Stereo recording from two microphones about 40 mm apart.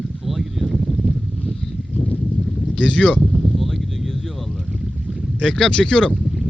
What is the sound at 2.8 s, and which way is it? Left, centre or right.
Speech, left.